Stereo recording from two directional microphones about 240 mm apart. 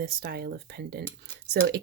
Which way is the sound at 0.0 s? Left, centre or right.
Right.